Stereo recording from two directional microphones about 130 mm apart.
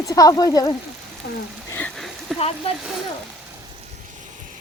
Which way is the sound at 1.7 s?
15° left (ahead or behind).